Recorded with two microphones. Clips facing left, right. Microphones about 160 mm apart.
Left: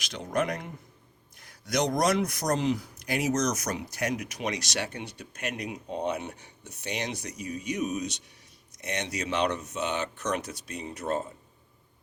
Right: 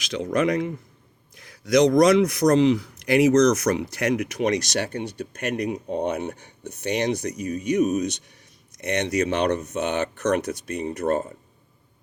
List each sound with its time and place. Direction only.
0.0 s a man's voice: 90° right; by 8.0 s 45° right (ahead or behind)
8.8 s a man's voice: 55° right (ahead or behind)